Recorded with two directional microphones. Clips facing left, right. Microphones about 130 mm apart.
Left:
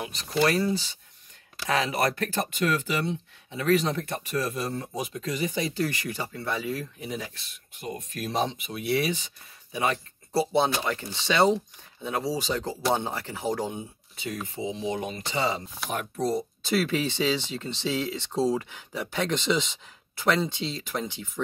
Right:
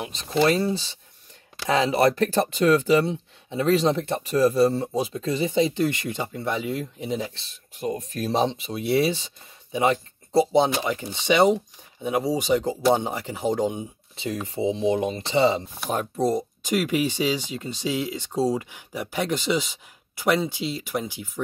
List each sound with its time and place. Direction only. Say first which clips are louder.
0.0 s speech: right 3 dB; 25° right (ahead or behind)
7.7 s speech: right 7 dB; 35° right (ahead or behind); by 21.3 s 10° right (ahead or behind)